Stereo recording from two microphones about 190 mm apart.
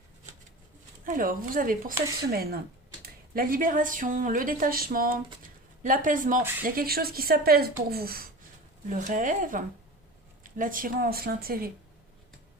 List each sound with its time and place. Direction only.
1.0 s speech: 45° right (ahead or behind)
8.9 s speech: 40° right (ahead or behind)